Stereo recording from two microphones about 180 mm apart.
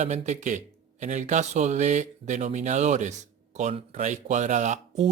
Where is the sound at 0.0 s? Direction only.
40° right (ahead or behind).